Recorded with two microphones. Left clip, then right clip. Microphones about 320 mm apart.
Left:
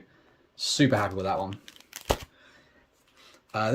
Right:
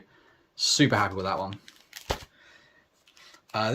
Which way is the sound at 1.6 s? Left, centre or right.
Left.